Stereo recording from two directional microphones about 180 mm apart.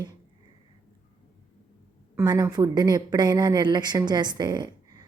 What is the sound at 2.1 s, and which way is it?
A woman's voice, 20° right (ahead or behind).